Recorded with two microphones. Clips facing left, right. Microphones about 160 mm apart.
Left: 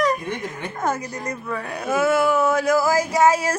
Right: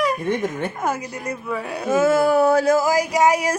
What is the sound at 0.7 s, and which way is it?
Speech, 10° right (ahead or behind).